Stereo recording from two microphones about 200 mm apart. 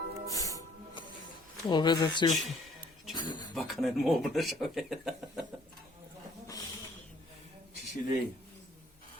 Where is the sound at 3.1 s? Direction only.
20° left (ahead or behind).